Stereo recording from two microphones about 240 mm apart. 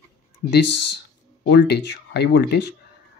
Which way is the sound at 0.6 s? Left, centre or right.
Left.